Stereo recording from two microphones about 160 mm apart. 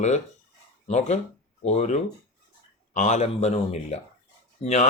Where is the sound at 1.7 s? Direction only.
45° left (ahead or behind).